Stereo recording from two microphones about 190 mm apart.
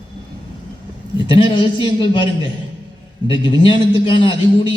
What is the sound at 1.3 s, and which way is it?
A man's voice, 25° left (ahead or behind).